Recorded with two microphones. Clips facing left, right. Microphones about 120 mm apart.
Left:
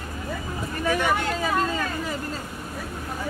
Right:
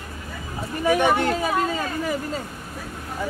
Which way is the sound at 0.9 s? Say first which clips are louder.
Right 5 dB; 20° right (ahead or behind).